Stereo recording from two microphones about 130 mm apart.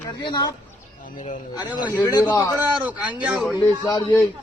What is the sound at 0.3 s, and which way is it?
Speech, 35° left (ahead or behind).